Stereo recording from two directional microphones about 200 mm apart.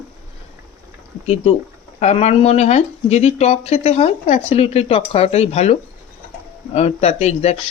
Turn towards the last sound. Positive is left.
turn(degrees=30)  # may be behind; listen again after turning